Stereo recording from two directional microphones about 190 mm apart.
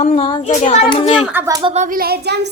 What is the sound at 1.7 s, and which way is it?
Speech, 45° right (ahead or behind).